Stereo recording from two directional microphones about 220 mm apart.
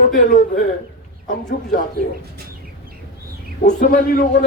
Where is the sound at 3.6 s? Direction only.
35° left (ahead or behind).